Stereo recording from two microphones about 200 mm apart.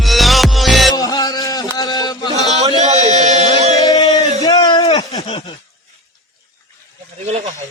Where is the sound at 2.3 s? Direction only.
35° right (ahead or behind).